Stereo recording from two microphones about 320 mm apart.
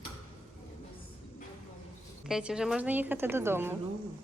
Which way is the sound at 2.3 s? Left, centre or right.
Centre.